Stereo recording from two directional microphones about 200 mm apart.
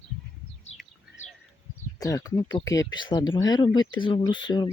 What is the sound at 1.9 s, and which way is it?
Speech, 15° left (ahead or behind).